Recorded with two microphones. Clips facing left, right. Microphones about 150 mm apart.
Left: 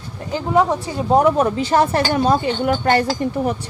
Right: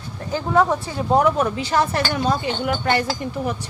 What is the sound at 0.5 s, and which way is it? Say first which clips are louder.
Speech: left 1 dB; 15° left (ahead or behind).